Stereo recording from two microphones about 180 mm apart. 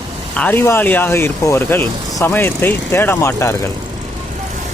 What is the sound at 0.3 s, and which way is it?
Speech, 10° left (ahead or behind).